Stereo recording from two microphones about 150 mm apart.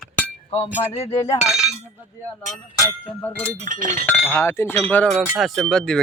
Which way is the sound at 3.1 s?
10° left (ahead or behind).